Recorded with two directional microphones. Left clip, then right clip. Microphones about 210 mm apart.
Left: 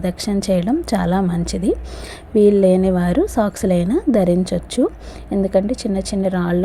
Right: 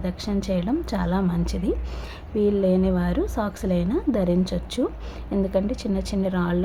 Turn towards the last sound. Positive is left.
turn(degrees=20)  # may be behind; listen again after turning